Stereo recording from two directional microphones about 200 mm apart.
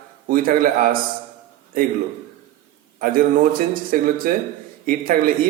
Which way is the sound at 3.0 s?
45° right (ahead or behind).